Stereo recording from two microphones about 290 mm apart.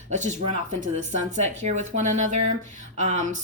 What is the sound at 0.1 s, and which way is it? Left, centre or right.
Speech, right.